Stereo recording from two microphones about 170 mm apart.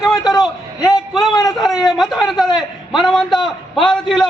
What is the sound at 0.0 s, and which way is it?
Speech, 25° left (ahead or behind).